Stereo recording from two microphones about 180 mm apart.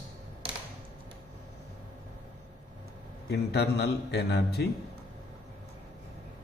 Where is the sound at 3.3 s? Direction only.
65° left (ahead or behind).